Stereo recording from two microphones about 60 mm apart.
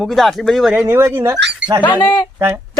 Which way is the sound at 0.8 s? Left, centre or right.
Right.